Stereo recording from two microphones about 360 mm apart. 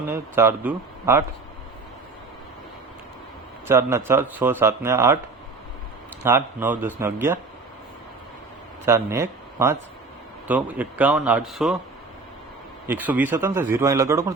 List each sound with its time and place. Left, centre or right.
0.1 s a man's voice: centre
3.7 s a man's voice: centre
6.2 s a man's voice: centre
8.9 s speech: centre
12.9 s a man's voice: centre